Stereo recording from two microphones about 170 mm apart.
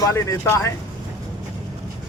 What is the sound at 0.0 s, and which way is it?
Speech, 20° left (ahead or behind).